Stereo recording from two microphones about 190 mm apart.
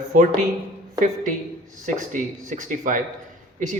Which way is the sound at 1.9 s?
40° right (ahead or behind).